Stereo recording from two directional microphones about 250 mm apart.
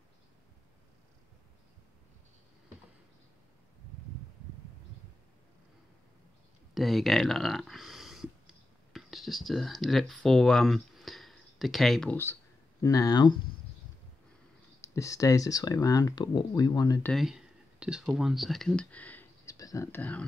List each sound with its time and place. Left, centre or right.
6.7 s speech: centre
14.8 s speech: centre
17.1 s speech: centre